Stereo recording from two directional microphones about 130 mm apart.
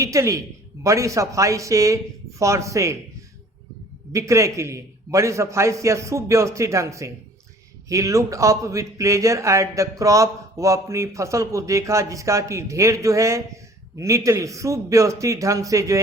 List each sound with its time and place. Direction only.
0.0 s speech: 25° right (ahead or behind)
4.1 s speech: 25° right (ahead or behind)